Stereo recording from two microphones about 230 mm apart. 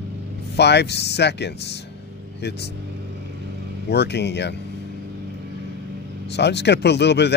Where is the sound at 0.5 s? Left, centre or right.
Left.